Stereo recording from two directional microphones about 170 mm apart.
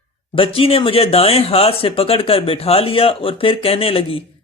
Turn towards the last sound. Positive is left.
turn(degrees=35)  # may be behind; listen again after turning